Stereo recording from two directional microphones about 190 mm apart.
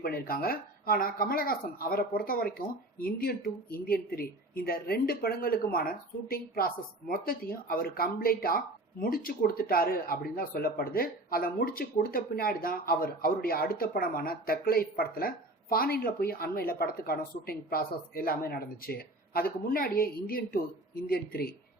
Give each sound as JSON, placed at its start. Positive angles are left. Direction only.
{"t": 0.0, "sound": "speech", "side_deg": 50}